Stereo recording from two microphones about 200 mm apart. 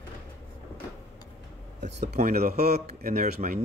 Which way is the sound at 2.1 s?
45° right (ahead or behind).